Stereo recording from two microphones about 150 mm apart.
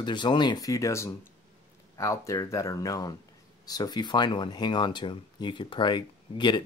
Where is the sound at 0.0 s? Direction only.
30° left (ahead or behind).